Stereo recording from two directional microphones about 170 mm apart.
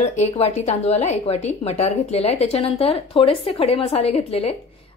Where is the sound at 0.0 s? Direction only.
40° left (ahead or behind).